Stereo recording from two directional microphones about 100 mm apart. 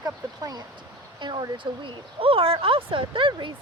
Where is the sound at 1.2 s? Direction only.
50° right (ahead or behind).